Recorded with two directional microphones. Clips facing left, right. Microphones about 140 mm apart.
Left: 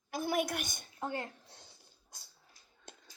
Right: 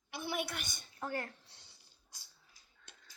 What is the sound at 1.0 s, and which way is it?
Speech, 20° left (ahead or behind).